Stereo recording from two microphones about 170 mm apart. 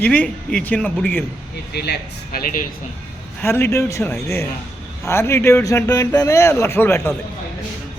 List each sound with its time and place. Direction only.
0.0 s a man's voice: 10° left (ahead or behind)
1.7 s speech: 70° left (ahead or behind)
3.4 s a man's voice: 15° left (ahead or behind)